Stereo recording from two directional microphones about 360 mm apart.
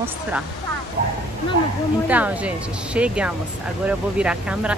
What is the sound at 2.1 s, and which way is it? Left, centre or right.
Speech, centre.